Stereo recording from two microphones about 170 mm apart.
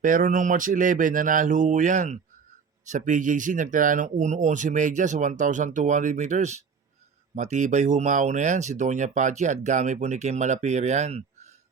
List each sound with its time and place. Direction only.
0.0 s speech: 50° right (ahead or behind)